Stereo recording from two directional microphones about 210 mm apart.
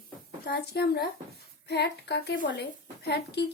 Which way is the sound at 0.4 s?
50° left (ahead or behind).